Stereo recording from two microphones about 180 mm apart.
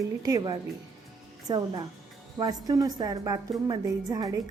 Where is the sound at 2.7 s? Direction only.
20° right (ahead or behind).